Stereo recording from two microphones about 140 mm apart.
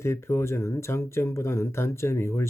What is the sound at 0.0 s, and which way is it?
Speech, 20° left (ahead or behind).